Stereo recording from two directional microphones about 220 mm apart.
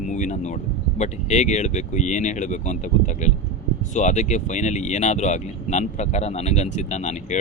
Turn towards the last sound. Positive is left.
turn(degrees=30)  # may be behind; listen again after turning